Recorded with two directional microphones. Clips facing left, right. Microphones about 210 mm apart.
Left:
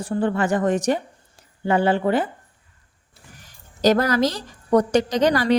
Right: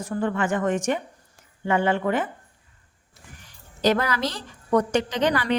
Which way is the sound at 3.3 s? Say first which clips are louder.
Left 7 dB; 40° left (ahead or behind).